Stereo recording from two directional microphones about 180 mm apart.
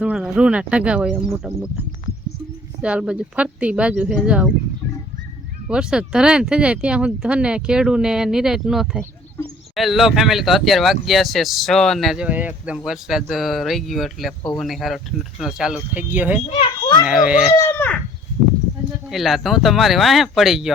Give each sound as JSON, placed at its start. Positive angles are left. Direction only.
{"t": 0.0, "sound": "speech", "side_deg": -5}
{"t": 2.8, "sound": "speech", "side_deg": -5}
{"t": 5.6, "sound": "speech", "side_deg": -5}
{"t": 16.6, "sound": "a child's voice", "side_deg": 25}
{"t": 17.1, "sound": "speech", "side_deg": -5}
{"t": 17.6, "sound": "speech", "side_deg": 10}
{"t": 19.1, "sound": "speech", "side_deg": 0}